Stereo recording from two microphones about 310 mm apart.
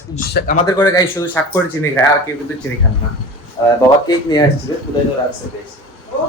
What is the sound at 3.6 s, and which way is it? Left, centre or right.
Speech, centre.